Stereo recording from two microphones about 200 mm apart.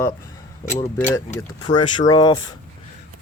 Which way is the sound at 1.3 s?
20° left (ahead or behind).